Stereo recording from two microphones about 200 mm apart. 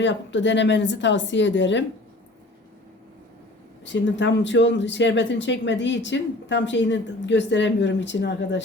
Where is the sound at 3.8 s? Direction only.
65° left (ahead or behind).